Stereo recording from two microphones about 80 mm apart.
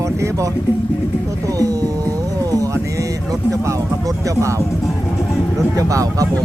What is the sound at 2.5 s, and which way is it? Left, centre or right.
Music, right.